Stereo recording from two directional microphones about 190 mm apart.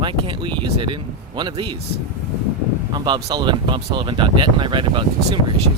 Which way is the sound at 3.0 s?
25° right (ahead or behind).